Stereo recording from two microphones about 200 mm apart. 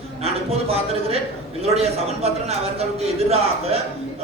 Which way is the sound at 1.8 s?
30° right (ahead or behind).